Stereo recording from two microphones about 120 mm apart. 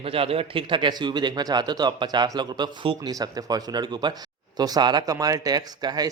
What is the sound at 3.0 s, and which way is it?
Speech, 30° right (ahead or behind).